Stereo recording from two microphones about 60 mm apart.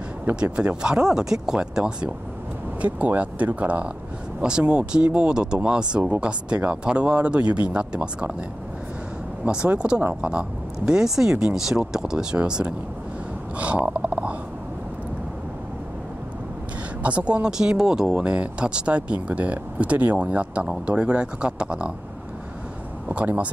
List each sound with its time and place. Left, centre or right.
0.4 s speech: centre
9.4 s speech: centre
13.6 s a sound: right
17.0 s speech: centre
23.0 s speech: right